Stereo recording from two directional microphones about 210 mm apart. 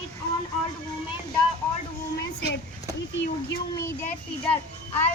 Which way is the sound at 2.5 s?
55° left (ahead or behind).